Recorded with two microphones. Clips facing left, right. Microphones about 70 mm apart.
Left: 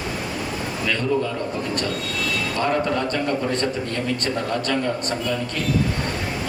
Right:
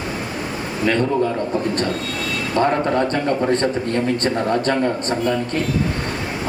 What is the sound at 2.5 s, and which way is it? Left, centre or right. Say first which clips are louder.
A man's voice: right 5 dB; right.